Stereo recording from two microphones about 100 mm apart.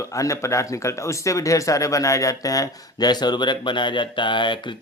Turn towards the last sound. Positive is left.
turn(degrees=50)  # may be behind; listen again after turning